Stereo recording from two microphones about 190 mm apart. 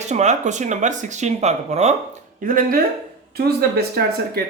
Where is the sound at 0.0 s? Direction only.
35° right (ahead or behind).